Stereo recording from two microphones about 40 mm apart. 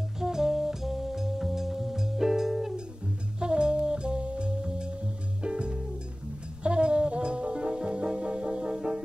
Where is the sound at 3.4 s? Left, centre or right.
Right.